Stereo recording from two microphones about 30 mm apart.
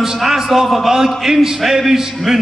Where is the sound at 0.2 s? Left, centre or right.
Centre.